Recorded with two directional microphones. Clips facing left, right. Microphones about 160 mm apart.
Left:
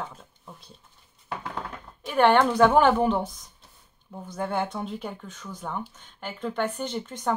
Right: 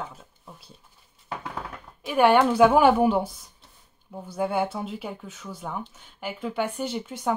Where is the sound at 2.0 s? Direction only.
10° right (ahead or behind).